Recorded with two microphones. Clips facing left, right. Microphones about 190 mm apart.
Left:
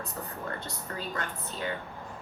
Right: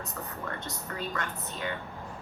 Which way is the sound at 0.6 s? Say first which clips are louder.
Right 1 dB; 30° left (ahead or behind).